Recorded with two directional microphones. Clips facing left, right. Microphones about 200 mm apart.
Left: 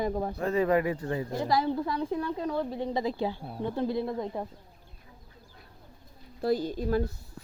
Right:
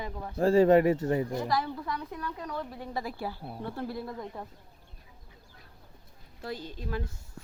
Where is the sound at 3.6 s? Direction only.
20° left (ahead or behind).